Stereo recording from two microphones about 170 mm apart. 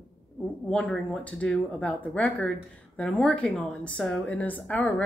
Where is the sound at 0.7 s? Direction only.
5° left (ahead or behind).